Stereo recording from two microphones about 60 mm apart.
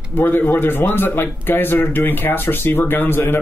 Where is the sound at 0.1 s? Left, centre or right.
Left.